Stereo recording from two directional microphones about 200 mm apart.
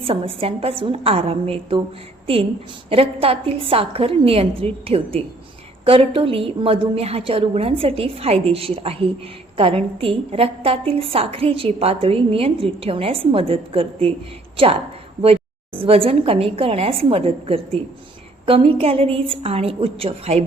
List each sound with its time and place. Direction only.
0.0 s a woman's voice: 30° right (ahead or behind)
2.9 s a woman's voice: 30° right (ahead or behind)